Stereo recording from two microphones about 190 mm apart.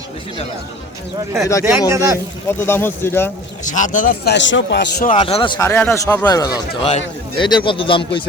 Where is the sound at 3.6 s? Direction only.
40° left (ahead or behind).